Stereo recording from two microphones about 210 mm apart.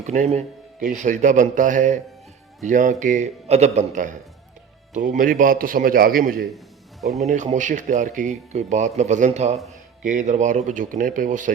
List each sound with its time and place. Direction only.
0.0 s speech: 35° right (ahead or behind)